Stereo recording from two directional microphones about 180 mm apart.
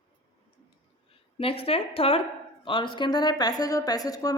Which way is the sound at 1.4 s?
30° left (ahead or behind).